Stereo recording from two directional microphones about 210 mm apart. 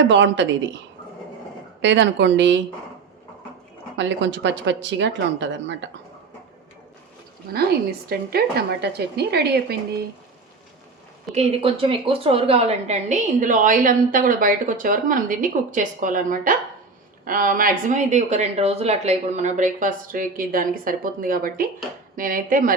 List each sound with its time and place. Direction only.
0.1 s speech: 60° right (ahead or behind)
1.8 s speech: 60° right (ahead or behind)
3.9 s speech: 60° right (ahead or behind)
8.1 s speech: 50° right (ahead or behind)
11.3 s a woman's voice: 30° right (ahead or behind)